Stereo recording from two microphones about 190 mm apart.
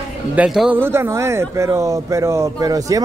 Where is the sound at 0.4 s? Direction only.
5° right (ahead or behind).